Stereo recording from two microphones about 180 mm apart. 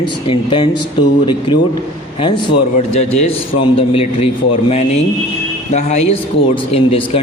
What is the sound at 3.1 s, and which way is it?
Speech, 35° left (ahead or behind).